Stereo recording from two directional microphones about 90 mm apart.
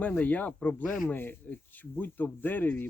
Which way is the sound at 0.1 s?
20° left (ahead or behind).